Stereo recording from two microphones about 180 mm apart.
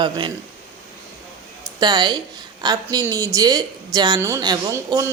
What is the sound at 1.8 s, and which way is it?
A woman's voice, 20° right (ahead or behind).